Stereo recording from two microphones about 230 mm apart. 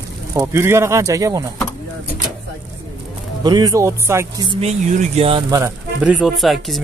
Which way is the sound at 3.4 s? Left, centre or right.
Centre.